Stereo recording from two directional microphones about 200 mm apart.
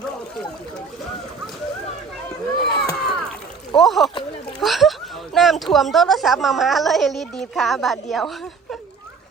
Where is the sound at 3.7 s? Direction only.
Centre (ahead or behind).